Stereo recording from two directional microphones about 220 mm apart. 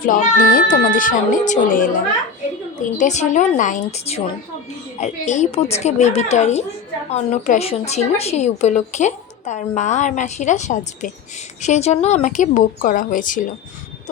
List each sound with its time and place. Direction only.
0.0 s a woman's voice: 40° left (ahead or behind)
3.0 s a woman's voice: 35° left (ahead or behind)